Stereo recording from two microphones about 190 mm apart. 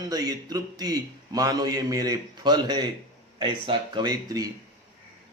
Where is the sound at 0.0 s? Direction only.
20° right (ahead or behind).